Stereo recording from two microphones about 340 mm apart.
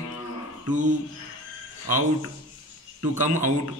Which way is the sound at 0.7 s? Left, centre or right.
Right.